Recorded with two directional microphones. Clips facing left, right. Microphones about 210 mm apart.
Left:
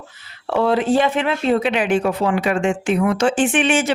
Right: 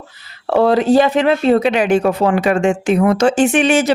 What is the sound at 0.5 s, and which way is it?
Speech, 40° right (ahead or behind).